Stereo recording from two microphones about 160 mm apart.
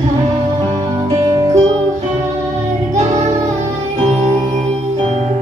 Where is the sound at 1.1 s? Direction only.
20° right (ahead or behind).